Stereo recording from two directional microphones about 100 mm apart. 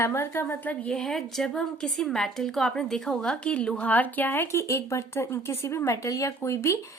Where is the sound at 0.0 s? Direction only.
25° left (ahead or behind).